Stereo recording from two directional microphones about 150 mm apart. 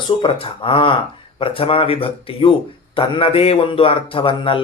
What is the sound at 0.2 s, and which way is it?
Speech, 35° left (ahead or behind).